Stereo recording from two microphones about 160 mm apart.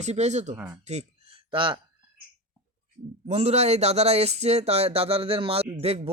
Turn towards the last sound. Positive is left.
turn(degrees=-40)  # may be behind; listen again after turning